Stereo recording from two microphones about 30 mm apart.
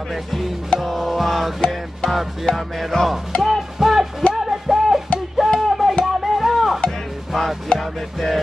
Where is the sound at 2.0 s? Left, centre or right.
Left.